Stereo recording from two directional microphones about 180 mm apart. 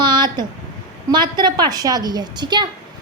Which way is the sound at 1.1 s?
25° right (ahead or behind).